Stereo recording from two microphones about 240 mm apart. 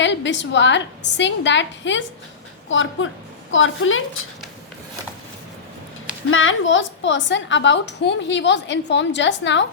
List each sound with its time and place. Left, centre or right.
0.0 s a woman's voice: left
6.3 s a woman's voice: left